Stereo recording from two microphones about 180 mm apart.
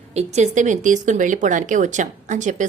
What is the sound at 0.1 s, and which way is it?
Speech, 35° right (ahead or behind).